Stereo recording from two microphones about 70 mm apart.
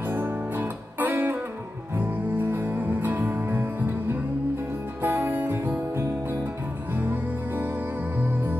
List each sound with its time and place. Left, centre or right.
0.0 s music: right